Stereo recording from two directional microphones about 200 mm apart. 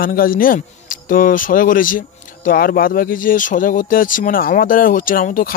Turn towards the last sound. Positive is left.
turn(degrees=45)  # may be behind; listen again after turning